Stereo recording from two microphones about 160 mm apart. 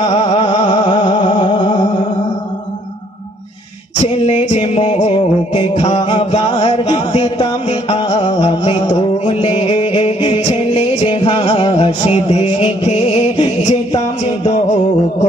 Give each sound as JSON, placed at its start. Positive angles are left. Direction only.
{"t": 0.0, "sound": "music", "side_deg": 40}
{"t": 4.0, "sound": "music", "side_deg": 45}
{"t": 13.7, "sound": "music", "side_deg": 45}